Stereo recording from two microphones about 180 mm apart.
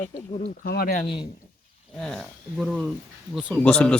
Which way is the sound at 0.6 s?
60° left (ahead or behind).